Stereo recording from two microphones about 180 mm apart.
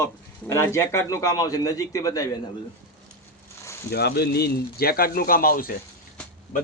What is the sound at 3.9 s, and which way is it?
Speech, 60° left (ahead or behind).